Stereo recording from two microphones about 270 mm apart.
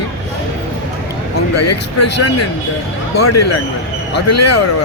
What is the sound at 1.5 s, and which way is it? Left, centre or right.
Speech, left.